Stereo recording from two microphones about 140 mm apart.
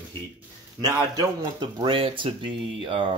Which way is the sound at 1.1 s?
30° right (ahead or behind).